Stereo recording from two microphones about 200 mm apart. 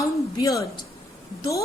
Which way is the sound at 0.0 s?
15° left (ahead or behind).